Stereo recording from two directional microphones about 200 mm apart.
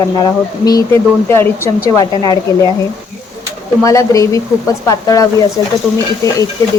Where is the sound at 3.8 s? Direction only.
15° left (ahead or behind).